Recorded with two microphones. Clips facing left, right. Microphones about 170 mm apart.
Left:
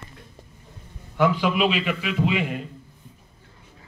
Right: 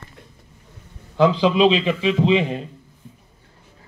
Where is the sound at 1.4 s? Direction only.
25° right (ahead or behind).